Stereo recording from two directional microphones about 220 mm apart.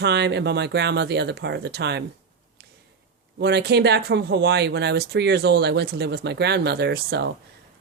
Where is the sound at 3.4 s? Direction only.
50° right (ahead or behind).